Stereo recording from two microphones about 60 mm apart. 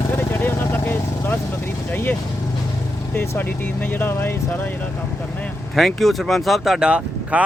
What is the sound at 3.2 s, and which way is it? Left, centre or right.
Speech, left.